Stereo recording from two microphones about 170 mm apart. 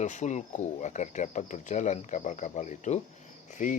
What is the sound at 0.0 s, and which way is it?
Speech, 45° left (ahead or behind).